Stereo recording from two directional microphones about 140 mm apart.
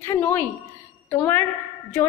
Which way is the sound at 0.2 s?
10° left (ahead or behind).